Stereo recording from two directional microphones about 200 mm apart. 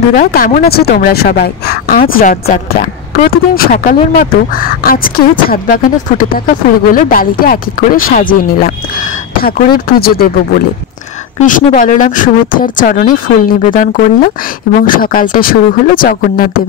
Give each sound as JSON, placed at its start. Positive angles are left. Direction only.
{"t": 0.1, "sound": "speech", "side_deg": 45}
{"t": 9.4, "sound": "speech", "side_deg": 50}